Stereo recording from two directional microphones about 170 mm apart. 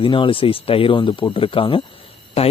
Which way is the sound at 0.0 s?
30° left (ahead or behind).